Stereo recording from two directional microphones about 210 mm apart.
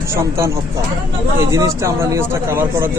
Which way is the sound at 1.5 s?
15° right (ahead or behind).